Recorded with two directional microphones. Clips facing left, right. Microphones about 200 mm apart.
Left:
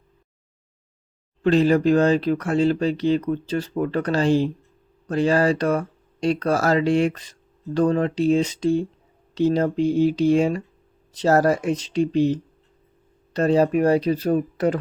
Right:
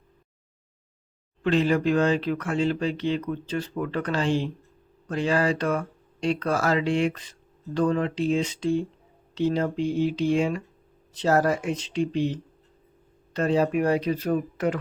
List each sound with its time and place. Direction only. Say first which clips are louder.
1.4 s speech: left 5 dB; 40° left (ahead or behind)